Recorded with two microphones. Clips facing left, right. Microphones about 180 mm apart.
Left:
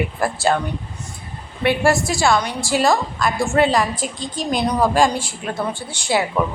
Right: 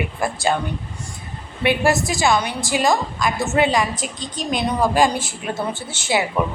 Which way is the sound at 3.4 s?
Centre (ahead or behind).